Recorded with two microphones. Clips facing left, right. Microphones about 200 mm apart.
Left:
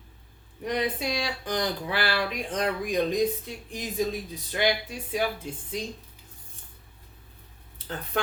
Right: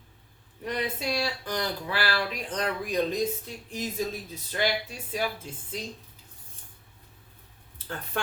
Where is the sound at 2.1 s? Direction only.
15° left (ahead or behind).